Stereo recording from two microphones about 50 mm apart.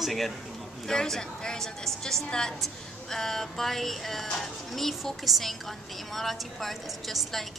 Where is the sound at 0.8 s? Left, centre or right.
Centre.